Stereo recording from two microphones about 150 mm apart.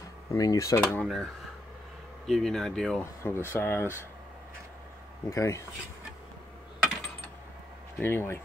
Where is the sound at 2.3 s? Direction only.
5° left (ahead or behind).